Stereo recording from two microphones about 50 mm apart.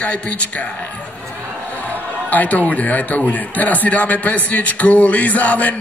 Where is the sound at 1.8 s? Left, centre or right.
Left.